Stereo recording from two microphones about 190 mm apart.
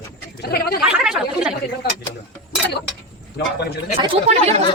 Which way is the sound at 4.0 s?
30° right (ahead or behind).